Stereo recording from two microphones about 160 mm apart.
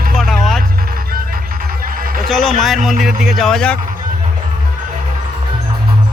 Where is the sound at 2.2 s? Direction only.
Centre (ahead or behind).